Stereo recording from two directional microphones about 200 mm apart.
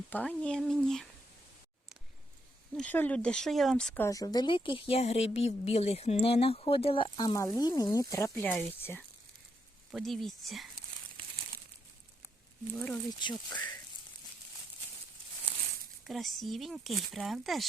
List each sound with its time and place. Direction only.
0.1 s speech: 5° left (ahead or behind)
2.7 s speech: 10° left (ahead or behind)
12.7 s speech: 10° left (ahead or behind)
13.1 s speech: 20° left (ahead or behind)
16.0 s speech: centre (ahead or behind)